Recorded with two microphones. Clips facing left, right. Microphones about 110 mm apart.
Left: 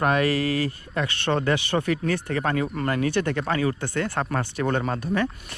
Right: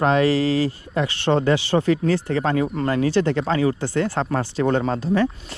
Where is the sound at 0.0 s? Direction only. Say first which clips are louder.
Right 4 dB; 25° right (ahead or behind).